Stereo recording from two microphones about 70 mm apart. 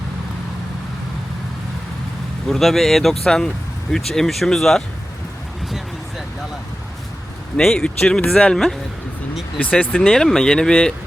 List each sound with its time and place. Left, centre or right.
2.5 s speech: centre
7.6 s speech: centre
9.6 s speech: left
10.0 s speech: centre